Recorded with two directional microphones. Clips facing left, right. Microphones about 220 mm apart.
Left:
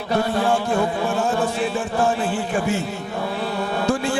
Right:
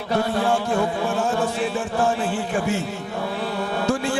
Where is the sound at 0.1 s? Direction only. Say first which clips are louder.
Left 1 dB; 20° left (ahead or behind).